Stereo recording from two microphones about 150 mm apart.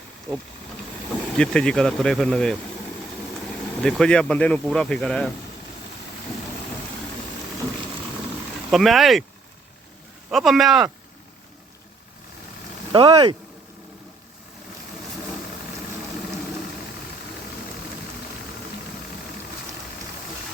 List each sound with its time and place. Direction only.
1.3 s speech: 5° left (ahead or behind)
3.8 s speech: 5° left (ahead or behind)
8.7 s speech: centre (ahead or behind)
10.2 s speech: centre (ahead or behind)
12.9 s speech: 40° right (ahead or behind)